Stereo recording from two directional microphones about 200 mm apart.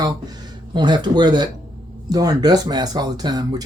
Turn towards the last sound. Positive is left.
turn(degrees=-20)  # may be behind; listen again after turning